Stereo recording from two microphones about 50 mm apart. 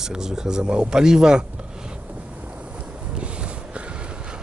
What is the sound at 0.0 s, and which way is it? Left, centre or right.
Speech, centre.